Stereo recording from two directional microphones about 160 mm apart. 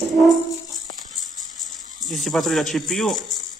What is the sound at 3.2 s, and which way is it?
Music, 25° left (ahead or behind).